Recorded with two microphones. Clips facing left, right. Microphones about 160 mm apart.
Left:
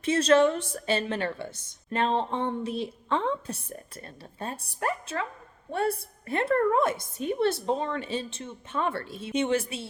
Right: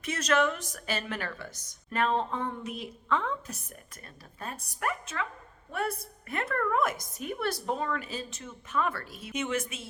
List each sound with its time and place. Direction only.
0.0 s a woman's voice: 30° left (ahead or behind)